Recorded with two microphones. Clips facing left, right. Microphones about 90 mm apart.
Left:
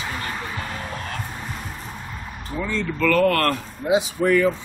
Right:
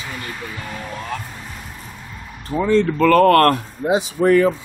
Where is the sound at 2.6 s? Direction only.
35° right (ahead or behind).